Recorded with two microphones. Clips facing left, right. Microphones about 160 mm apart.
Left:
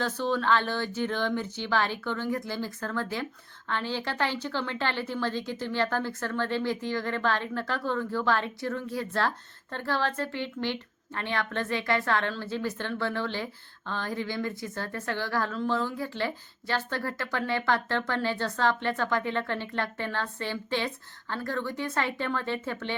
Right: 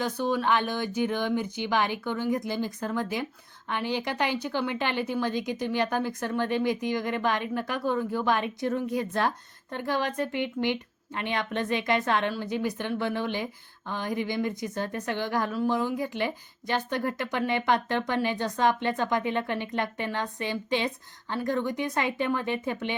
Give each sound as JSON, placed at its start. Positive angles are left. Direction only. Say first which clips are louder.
{"t": 0.0, "sound": "a woman's voice", "louder": "right 1 dB", "side_deg": -10}